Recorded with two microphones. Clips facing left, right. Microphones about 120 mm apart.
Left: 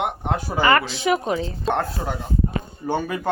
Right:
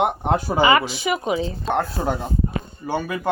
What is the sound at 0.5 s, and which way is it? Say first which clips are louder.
Speech: even; 10° right (ahead or behind).